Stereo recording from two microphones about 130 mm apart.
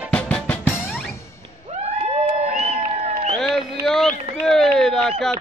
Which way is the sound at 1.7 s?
60° right (ahead or behind).